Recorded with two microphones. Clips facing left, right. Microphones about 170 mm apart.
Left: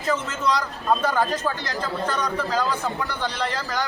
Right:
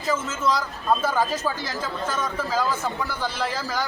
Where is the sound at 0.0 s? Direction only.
Centre (ahead or behind).